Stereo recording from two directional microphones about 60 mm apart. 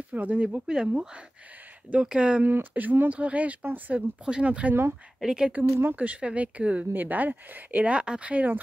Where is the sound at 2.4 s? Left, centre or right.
Right.